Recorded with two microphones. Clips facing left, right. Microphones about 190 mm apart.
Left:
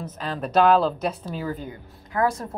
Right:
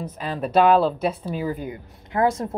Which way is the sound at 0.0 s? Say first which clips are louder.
Right 2 dB; 5° right (ahead or behind).